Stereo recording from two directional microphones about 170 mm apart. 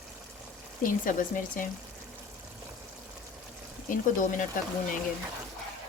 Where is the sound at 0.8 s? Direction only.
55° left (ahead or behind).